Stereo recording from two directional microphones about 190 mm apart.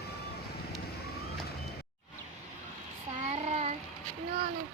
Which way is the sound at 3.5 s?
35° right (ahead or behind).